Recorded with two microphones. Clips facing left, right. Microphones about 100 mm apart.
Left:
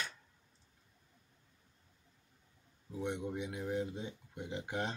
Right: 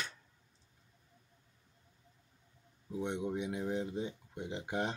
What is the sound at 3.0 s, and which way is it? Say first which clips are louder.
Speech: right 2 dB; 20° right (ahead or behind).